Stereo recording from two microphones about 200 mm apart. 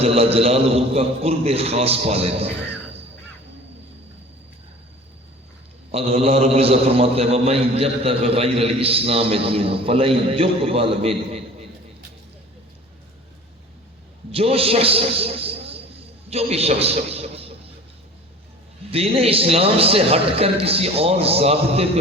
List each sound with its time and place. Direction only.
0.0 s a man's voice: 30° right (ahead or behind)
5.9 s a man's voice: 30° right (ahead or behind)
14.3 s a man's voice: 30° right (ahead or behind)
18.9 s a man's voice: 30° right (ahead or behind)